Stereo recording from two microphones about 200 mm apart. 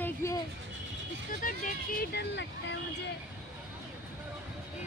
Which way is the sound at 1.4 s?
45° left (ahead or behind).